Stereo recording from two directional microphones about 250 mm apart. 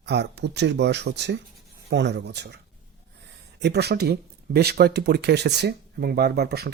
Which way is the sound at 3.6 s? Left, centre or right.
Right.